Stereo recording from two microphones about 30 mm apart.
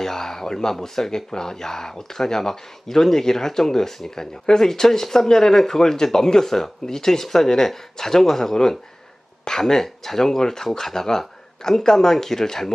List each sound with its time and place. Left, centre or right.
0.0 s speech: centre